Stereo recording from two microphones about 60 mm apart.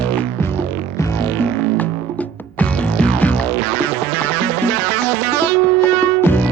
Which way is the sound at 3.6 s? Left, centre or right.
Left.